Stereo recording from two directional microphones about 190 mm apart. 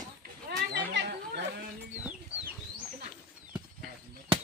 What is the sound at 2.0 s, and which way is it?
Chicken, 5° right (ahead or behind).